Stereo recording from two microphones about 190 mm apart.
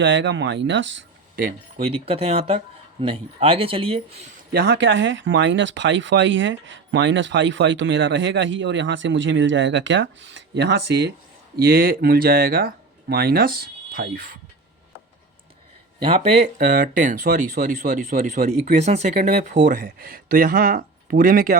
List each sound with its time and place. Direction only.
0.0 s speech: 75° right (ahead or behind)
1.8 s speech: 30° right (ahead or behind)
4.5 s speech: 65° right (ahead or behind)
11.5 s speech: 55° right (ahead or behind)
16.0 s speech: 30° right (ahead or behind)
19.6 s speech: 50° right (ahead or behind)